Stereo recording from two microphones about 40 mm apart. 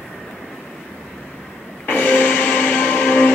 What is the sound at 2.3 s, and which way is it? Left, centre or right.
Music, left.